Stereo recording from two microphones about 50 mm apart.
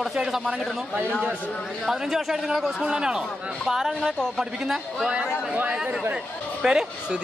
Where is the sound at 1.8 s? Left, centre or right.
Centre.